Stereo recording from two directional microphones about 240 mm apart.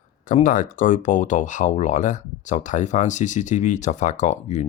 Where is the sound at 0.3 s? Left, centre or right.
Left.